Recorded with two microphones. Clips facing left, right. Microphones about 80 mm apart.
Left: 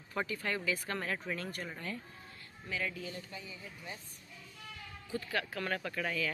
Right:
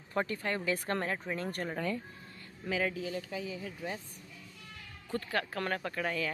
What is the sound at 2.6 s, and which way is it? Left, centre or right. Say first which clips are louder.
Speech: right 6 dB; right.